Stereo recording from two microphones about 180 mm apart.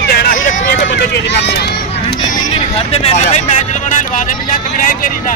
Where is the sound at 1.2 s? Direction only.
70° left (ahead or behind).